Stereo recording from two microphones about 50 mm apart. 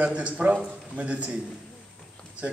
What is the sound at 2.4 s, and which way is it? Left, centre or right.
Speech, right.